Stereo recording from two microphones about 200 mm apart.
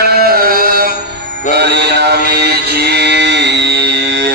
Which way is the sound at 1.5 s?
55° right (ahead or behind).